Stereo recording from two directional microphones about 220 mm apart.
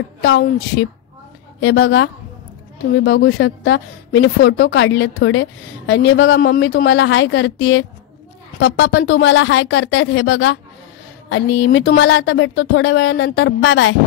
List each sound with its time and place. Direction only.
0.2 s a woman's voice: 55° left (ahead or behind)